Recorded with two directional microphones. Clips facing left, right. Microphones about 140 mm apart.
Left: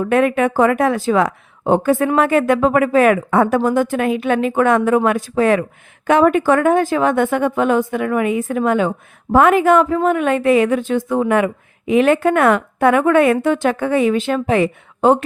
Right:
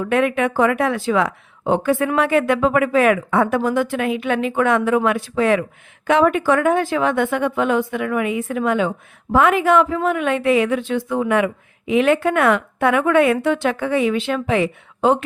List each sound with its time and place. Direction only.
0.0 s a woman's voice: 40° left (ahead or behind)